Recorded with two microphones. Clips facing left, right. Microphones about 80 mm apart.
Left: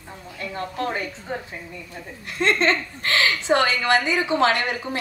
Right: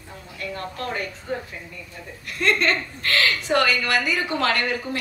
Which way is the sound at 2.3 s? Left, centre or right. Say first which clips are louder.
Left 1 dB; left.